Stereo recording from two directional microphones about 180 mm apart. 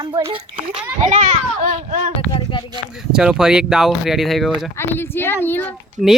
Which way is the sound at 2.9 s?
5° right (ahead or behind).